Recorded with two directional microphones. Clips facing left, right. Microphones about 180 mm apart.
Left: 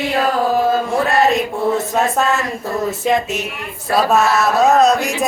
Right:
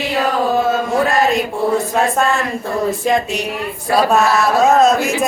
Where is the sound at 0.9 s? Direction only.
Centre (ahead or behind).